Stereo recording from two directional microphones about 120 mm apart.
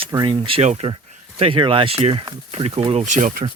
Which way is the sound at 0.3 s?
45° right (ahead or behind).